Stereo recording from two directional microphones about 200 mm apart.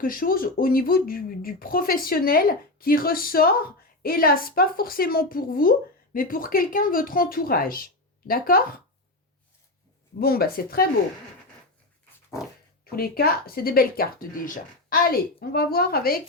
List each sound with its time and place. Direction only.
0.0 s speech: 45° left (ahead or behind)
10.2 s speech: 50° left (ahead or behind)
12.8 s speech: 50° left (ahead or behind)